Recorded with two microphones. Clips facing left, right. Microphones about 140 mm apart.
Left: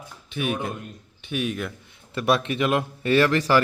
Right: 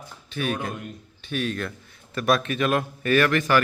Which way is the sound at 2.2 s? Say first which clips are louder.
Even; 25° left (ahead or behind).